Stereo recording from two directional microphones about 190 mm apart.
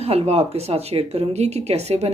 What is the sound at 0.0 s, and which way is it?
Speech, 30° right (ahead or behind).